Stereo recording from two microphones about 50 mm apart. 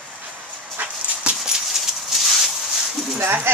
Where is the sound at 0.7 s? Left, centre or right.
Right.